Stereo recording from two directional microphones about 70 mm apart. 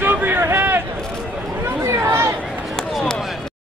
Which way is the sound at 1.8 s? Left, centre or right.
Right.